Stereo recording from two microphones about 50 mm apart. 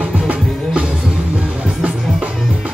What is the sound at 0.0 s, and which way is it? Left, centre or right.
Music, right.